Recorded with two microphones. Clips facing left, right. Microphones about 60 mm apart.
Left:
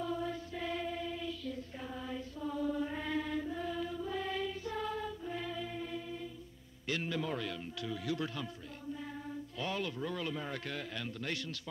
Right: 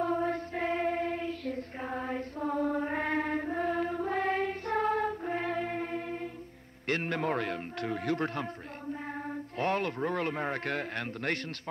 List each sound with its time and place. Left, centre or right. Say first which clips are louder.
0.0 s choir: right 8 dB; right
6.9 s a man's voice: right 6 dB; right
9.6 s a man's voice: right 8 dB; right